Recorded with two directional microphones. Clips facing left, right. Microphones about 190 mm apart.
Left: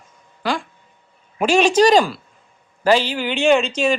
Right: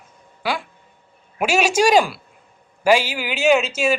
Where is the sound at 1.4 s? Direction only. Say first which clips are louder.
Left 3 dB; 10° right (ahead or behind).